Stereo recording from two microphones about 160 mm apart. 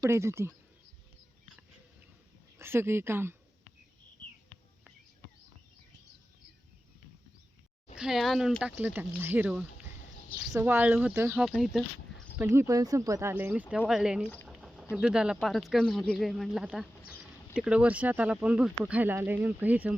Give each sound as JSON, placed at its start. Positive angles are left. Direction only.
{"t": 0.0, "sound": "speech", "side_deg": -15}
{"t": 2.6, "sound": "speech", "side_deg": -15}
{"t": 7.9, "sound": "speech", "side_deg": -5}
{"t": 11.3, "sound": "speech", "side_deg": 0}
{"t": 12.4, "sound": "speech", "side_deg": -15}
{"t": 14.4, "sound": "bird", "side_deg": 0}
{"t": 14.9, "sound": "speech", "side_deg": -5}